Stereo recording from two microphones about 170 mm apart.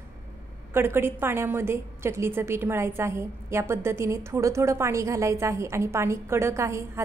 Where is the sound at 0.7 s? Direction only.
15° right (ahead or behind).